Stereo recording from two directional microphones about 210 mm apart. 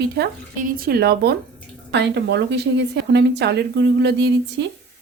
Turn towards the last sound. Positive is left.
turn(degrees=-50)  # may be behind; listen again after turning